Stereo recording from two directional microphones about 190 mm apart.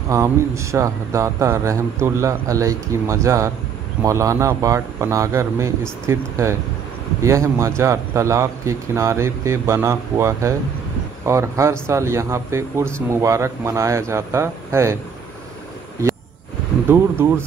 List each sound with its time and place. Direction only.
0.1 s speech: 15° right (ahead or behind)